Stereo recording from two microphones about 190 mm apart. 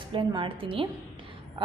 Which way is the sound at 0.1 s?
25° right (ahead or behind).